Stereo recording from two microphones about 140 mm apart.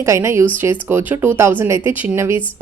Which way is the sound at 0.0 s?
20° right (ahead or behind).